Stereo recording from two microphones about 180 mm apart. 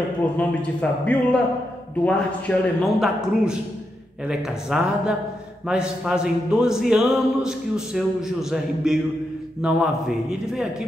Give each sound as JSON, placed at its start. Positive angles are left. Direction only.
{"t": 0.4, "sound": "a man's voice", "side_deg": 5}